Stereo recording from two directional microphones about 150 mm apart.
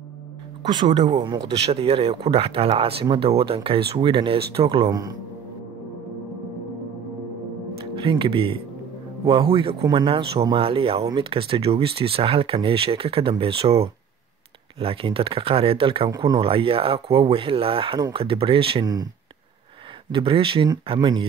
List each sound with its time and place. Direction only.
0.7 s speech: 30° right (ahead or behind)
1.5 s speech: 40° right (ahead or behind)
7.8 s speech: 35° right (ahead or behind)
20.1 s speech: 35° right (ahead or behind)